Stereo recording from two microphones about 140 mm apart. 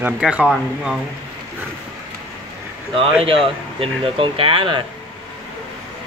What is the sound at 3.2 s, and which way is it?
Speech, 40° right (ahead or behind).